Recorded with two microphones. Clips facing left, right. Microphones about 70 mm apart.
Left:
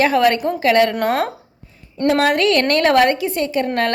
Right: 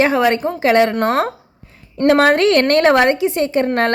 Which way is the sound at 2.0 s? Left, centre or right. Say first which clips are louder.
Right 3 dB; right.